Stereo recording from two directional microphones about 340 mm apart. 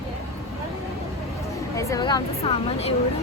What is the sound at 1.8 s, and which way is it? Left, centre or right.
A woman's voice, centre.